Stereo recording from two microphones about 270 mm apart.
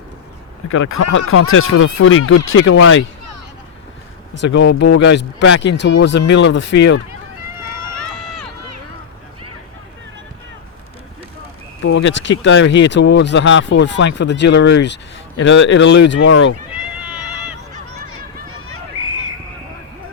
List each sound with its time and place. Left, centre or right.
0.7 s speech: left
4.4 s speech: left
11.8 s speech: left
16.7 s cat: centre